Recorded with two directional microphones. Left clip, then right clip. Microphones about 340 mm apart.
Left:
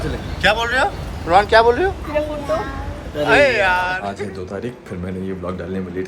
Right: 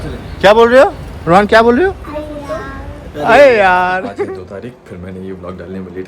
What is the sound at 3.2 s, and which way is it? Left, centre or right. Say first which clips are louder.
Speech: right 7 dB; centre.